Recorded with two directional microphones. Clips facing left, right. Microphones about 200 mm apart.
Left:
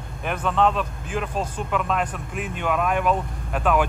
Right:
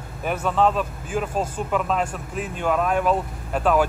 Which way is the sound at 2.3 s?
40° right (ahead or behind).